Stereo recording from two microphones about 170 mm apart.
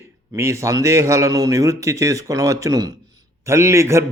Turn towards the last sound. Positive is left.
turn(degrees=-15)  # may be behind; listen again after turning